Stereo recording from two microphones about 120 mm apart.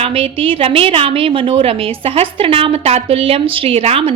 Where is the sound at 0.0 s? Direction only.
50° right (ahead or behind).